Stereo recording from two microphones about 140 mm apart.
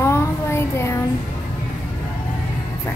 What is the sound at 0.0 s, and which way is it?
Child singing, 20° left (ahead or behind).